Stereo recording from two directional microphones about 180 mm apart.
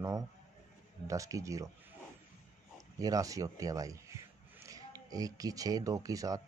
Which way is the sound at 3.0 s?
20° right (ahead or behind).